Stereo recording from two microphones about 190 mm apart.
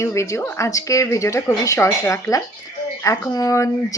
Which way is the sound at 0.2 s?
15° left (ahead or behind).